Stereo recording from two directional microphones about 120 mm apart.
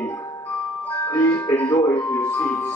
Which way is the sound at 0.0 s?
30° left (ahead or behind).